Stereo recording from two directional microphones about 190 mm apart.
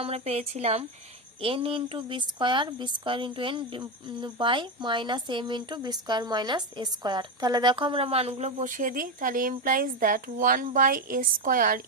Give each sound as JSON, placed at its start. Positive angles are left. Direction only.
{"t": 0.0, "sound": "speech", "side_deg": -35}